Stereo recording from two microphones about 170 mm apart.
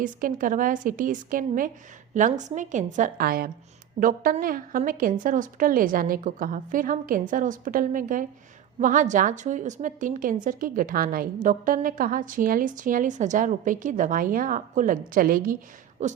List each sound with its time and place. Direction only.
0.0 s a woman's voice: 55° right (ahead or behind)
16.0 s a woman's voice: 45° right (ahead or behind)